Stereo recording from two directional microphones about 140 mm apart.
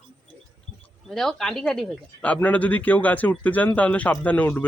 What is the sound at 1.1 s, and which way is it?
Speech, 5° left (ahead or behind).